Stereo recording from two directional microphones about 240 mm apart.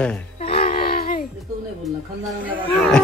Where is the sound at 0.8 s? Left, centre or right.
Left.